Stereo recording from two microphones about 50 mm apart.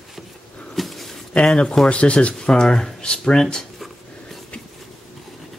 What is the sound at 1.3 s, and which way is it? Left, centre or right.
Speech, centre.